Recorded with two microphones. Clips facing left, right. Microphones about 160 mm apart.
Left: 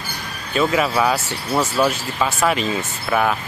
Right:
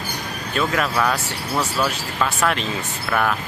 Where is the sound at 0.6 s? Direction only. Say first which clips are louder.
Left 3 dB; 5° left (ahead or behind).